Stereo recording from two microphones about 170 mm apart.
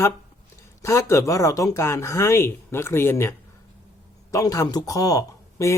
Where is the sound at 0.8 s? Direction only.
15° left (ahead or behind).